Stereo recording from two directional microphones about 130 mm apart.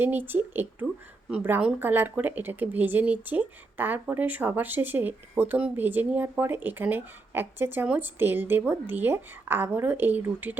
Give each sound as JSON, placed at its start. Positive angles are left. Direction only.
{"t": 0.0, "sound": "speech", "side_deg": -15}